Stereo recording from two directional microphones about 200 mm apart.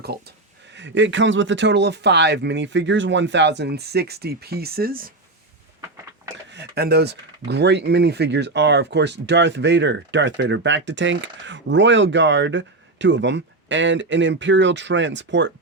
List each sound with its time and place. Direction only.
0.0 s speech: 55° right (ahead or behind)
6.5 s speech: 55° right (ahead or behind)